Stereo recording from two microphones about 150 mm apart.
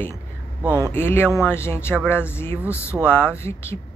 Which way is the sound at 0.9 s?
15° left (ahead or behind).